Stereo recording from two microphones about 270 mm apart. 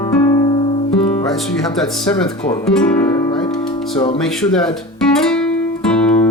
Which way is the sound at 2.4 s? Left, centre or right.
Centre.